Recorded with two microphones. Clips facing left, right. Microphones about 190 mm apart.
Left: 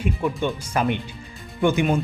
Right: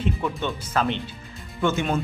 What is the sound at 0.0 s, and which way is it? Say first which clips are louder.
Speech: left 3 dB; 10° left (ahead or behind).